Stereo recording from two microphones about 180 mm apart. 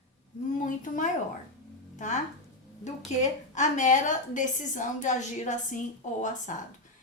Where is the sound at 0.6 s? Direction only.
45° left (ahead or behind).